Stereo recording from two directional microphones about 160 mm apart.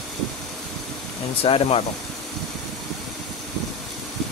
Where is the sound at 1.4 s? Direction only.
35° left (ahead or behind).